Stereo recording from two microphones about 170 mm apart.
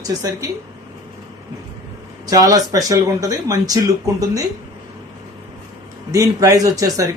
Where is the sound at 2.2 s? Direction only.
20° right (ahead or behind).